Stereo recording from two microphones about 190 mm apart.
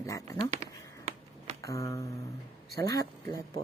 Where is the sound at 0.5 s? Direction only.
35° right (ahead or behind).